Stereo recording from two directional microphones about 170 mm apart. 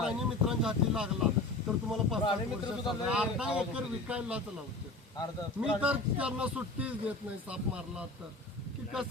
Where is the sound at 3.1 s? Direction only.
5° right (ahead or behind).